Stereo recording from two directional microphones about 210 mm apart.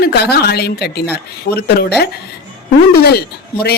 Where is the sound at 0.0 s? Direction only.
50° left (ahead or behind).